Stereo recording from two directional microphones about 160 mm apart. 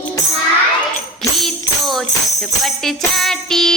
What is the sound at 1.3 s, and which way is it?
Music, centre (ahead or behind).